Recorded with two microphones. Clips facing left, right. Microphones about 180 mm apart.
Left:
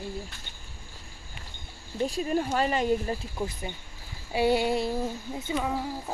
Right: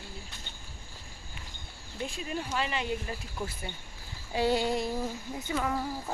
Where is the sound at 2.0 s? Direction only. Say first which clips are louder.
Left 8 dB; 40° left (ahead or behind).